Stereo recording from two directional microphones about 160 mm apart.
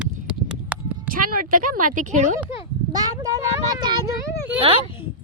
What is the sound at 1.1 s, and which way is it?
Speech, 60° right (ahead or behind).